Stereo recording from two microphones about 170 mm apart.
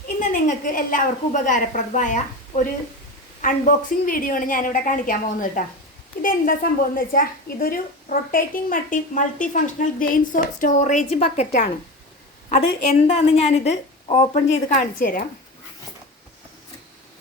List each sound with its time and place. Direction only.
0.2 s a woman's voice: 50° left (ahead or behind)
3.4 s a woman's voice: 50° left (ahead or behind)
12.5 s a woman's voice: 40° left (ahead or behind); by 15.2 s 55° left (ahead or behind)